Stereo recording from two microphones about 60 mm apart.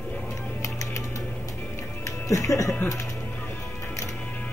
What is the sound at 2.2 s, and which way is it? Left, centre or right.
Speech, left.